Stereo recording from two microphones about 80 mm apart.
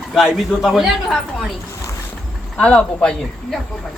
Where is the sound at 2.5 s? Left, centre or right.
Centre.